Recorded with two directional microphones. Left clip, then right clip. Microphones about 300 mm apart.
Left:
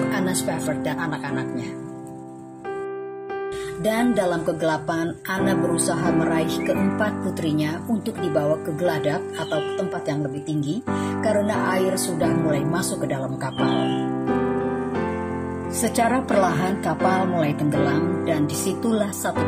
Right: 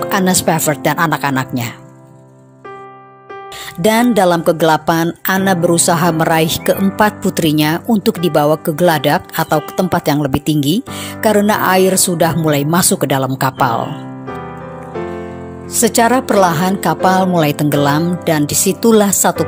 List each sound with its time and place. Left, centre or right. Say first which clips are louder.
0.1 s music: right 11 dB; right
3.8 s music: right 10 dB; right
15.8 s music: right 10 dB; right